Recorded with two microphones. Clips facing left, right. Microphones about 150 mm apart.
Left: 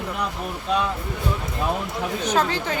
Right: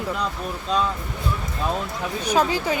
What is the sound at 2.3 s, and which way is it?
Speech, 10° right (ahead or behind).